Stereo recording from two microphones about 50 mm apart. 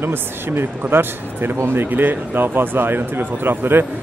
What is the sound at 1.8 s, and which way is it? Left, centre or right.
Speech, right.